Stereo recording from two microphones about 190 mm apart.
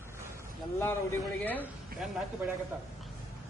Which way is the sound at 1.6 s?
Centre (ahead or behind).